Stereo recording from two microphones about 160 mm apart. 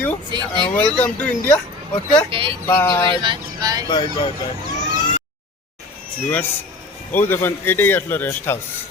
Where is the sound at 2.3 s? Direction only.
35° right (ahead or behind).